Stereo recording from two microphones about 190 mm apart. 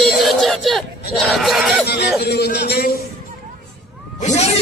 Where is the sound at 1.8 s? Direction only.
60° left (ahead or behind).